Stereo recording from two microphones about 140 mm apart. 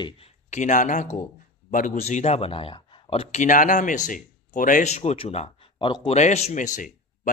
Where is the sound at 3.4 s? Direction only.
65° left (ahead or behind); by 5.7 s 45° left (ahead or behind).